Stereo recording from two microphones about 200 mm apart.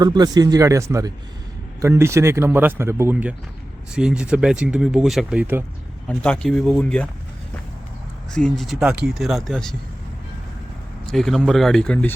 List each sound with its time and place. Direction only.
0.0 s speech: 20° right (ahead or behind)
6.1 s speech: 5° left (ahead or behind)
8.3 s speech: 5° left (ahead or behind)
11.0 s speech: centre (ahead or behind)